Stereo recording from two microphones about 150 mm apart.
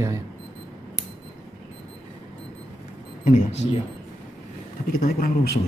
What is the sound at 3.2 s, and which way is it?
Speech, 60° left (ahead or behind).